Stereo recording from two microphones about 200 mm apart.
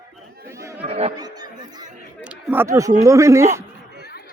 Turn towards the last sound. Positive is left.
turn(degrees=-15)  # may be behind; listen again after turning